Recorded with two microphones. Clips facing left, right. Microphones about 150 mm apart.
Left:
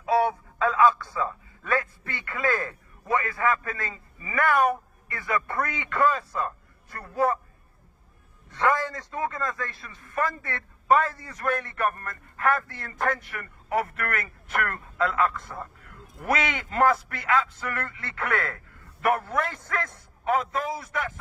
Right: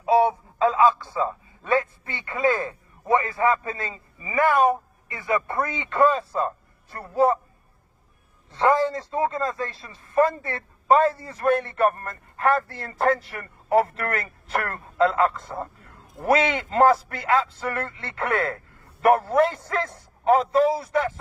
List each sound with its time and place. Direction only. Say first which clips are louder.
0.0 s a man's voice: right 4 dB; 25° right (ahead or behind)
8.5 s a man's voice: right 5 dB; 30° right (ahead or behind)